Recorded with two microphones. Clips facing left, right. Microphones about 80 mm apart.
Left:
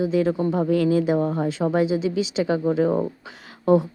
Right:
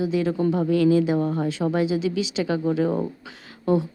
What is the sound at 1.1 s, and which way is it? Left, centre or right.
Speech, left.